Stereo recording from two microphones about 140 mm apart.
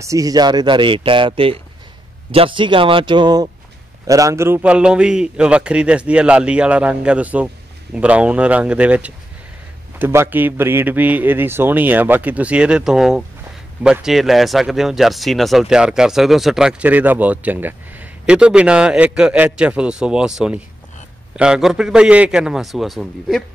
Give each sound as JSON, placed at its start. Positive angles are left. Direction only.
{"t": 0.0, "sound": "a man's voice", "side_deg": -25}